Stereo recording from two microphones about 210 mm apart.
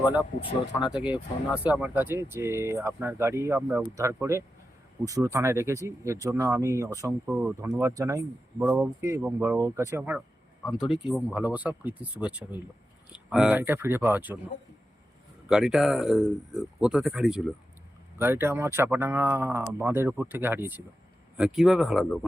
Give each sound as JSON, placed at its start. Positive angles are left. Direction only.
{"t": 0.8, "sound": "speech", "side_deg": -5}
{"t": 15.4, "sound": "speech", "side_deg": -5}